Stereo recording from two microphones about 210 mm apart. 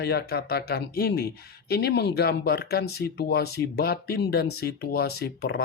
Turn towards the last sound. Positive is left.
turn(degrees=50)  # may be behind; listen again after turning